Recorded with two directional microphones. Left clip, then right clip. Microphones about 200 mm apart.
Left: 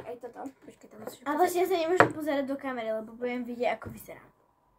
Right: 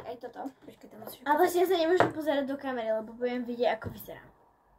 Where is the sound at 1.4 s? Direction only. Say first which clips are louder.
Left 1 dB; 20° right (ahead or behind).